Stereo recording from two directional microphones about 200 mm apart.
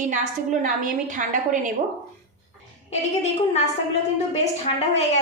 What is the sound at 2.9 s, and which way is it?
Speech, 35° left (ahead or behind).